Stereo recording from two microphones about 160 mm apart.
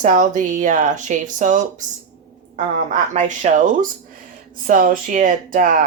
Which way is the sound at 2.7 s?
50° right (ahead or behind).